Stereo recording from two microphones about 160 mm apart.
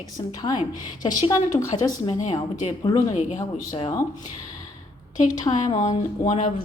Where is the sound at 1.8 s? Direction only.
25° left (ahead or behind).